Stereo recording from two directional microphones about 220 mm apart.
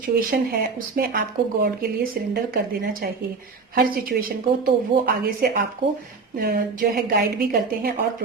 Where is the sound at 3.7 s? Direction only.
45° right (ahead or behind).